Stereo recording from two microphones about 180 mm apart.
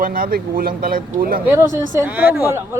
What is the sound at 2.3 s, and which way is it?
Speech, 15° right (ahead or behind).